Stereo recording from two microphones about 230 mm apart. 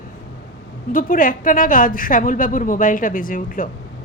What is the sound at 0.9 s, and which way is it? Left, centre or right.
A woman's voice, left.